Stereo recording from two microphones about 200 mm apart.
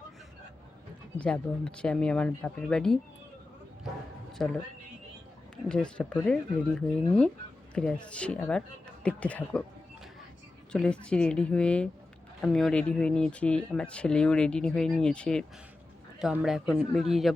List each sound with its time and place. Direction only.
1.2 s speech: 5° left (ahead or behind)
4.4 s speech: centre (ahead or behind)
5.6 s speech: 5° left (ahead or behind)
10.7 s speech: 5° left (ahead or behind)